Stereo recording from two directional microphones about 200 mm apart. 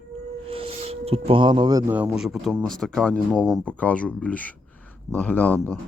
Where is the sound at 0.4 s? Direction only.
30° right (ahead or behind).